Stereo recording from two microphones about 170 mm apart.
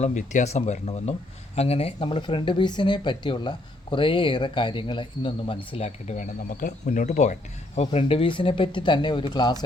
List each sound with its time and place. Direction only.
0.0 s speech: 45° left (ahead or behind); by 5.5 s 30° left (ahead or behind)
5.7 s speech: 40° left (ahead or behind)
7.8 s speech: 35° left (ahead or behind)